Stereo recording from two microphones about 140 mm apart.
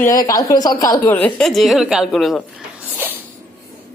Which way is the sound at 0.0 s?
25° left (ahead or behind).